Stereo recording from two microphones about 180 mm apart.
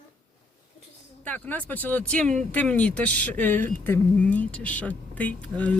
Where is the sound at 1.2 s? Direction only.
10° left (ahead or behind).